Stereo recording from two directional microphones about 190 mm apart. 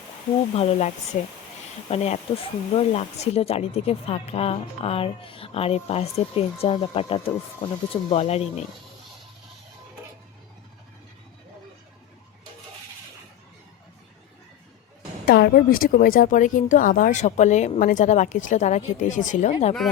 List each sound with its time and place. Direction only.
0.5 s speech: 35° left (ahead or behind)
15.3 s speech: 55° left (ahead or behind); by 19.7 s 35° left (ahead or behind)